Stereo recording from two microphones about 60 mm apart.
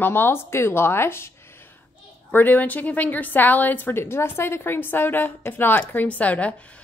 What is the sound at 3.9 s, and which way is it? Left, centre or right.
A woman's voice, left.